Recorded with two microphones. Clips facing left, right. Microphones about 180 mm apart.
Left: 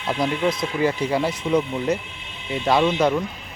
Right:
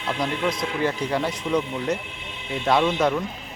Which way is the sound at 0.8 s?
10° left (ahead or behind).